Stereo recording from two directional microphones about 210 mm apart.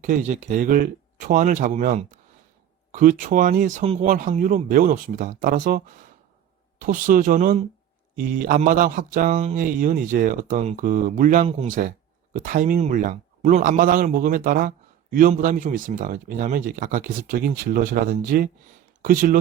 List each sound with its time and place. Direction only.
0.0 s a man's voice: 35° right (ahead or behind)